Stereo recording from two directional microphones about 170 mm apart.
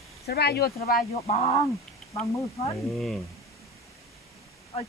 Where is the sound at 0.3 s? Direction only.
70° left (ahead or behind).